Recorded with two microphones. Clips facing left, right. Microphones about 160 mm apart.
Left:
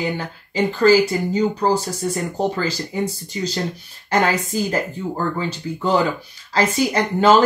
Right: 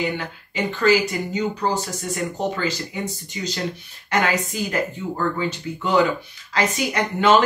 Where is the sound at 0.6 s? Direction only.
35° left (ahead or behind).